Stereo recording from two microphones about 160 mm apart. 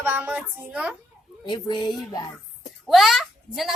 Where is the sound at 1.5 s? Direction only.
25° left (ahead or behind).